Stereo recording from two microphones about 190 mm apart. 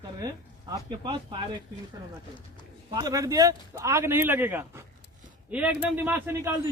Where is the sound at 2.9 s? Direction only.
20° right (ahead or behind).